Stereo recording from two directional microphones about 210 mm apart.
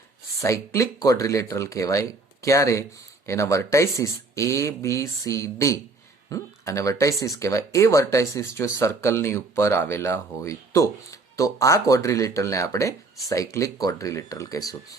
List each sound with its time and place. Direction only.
0.4 s speech: 15° left (ahead or behind)